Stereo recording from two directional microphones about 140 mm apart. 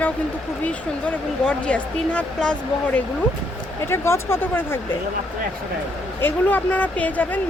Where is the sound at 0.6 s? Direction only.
10° left (ahead or behind).